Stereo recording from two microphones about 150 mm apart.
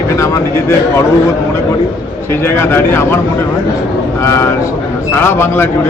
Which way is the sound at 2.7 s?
15° left (ahead or behind).